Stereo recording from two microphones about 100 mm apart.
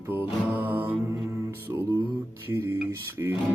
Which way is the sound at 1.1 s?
30° right (ahead or behind).